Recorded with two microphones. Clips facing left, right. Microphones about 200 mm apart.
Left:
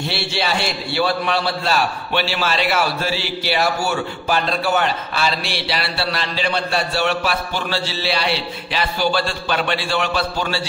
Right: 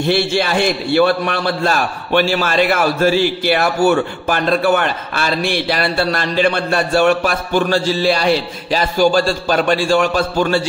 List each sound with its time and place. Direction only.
0.1 s a man's voice: 50° right (ahead or behind)